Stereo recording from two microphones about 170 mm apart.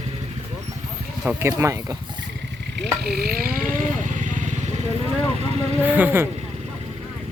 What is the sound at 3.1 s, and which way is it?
Wild animals, 60° right (ahead or behind).